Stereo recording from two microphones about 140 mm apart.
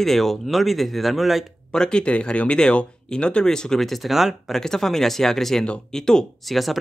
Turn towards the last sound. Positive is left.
turn(degrees=0)  # may be behind; listen again after turning